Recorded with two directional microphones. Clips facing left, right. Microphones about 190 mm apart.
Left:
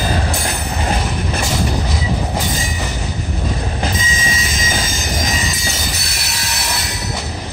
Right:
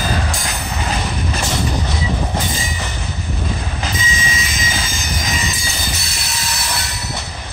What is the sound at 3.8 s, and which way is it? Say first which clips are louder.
Train: left 2 dB; 45° left (ahead or behind).